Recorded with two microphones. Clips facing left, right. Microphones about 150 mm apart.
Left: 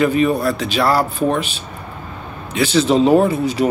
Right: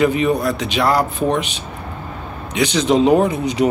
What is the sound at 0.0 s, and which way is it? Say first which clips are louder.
Speech: left 1 dB; 20° right (ahead or behind).